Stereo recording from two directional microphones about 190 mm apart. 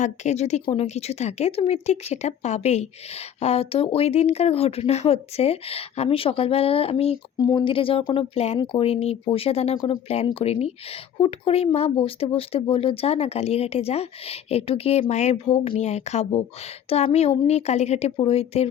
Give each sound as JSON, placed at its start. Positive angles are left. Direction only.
{"t": 0.0, "sound": "speech", "side_deg": 40}